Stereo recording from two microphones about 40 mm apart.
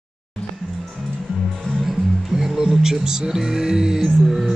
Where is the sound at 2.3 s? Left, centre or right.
Centre.